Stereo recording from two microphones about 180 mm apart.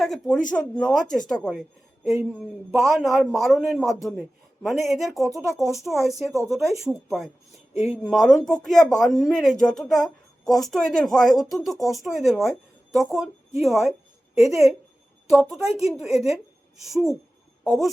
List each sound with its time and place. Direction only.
0.0 s speech: 5° left (ahead or behind)
2.8 s speech: centre (ahead or behind)
7.7 s speech: 35° left (ahead or behind)
8.1 s speech: centre (ahead or behind)
15.6 s speech: 35° left (ahead or behind)
16.0 s speech: centre (ahead or behind)